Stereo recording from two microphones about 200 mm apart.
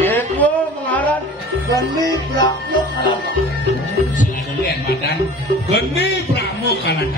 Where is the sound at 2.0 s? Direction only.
20° left (ahead or behind).